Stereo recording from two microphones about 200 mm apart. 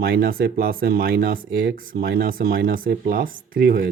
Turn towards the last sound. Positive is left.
turn(degrees=-45)  # may be behind; listen again after turning